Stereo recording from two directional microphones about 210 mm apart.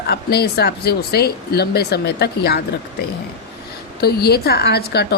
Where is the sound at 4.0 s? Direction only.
50° left (ahead or behind).